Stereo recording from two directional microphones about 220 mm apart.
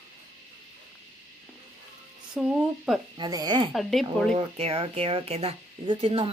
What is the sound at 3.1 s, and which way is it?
Speech, 20° right (ahead or behind).